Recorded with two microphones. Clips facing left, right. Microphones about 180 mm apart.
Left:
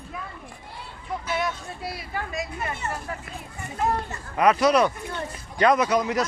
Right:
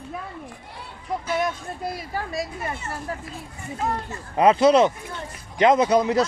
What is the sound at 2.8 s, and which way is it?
Speech, 65° left (ahead or behind).